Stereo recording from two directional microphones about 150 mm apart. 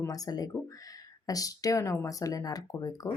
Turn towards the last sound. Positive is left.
turn(degrees=25)  # may be behind; listen again after turning